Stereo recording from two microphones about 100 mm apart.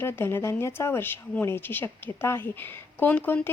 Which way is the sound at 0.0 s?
25° left (ahead or behind).